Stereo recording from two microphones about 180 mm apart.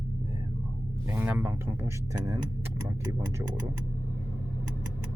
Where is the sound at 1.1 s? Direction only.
10° right (ahead or behind).